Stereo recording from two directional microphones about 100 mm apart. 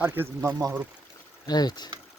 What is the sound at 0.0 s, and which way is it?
Speech, 20° right (ahead or behind).